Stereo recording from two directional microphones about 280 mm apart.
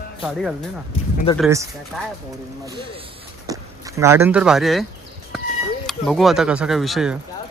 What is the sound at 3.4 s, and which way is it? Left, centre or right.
Speech, centre.